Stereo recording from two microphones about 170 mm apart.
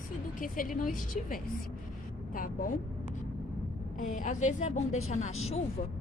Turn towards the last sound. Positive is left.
turn(degrees=40)  # may be behind; listen again after turning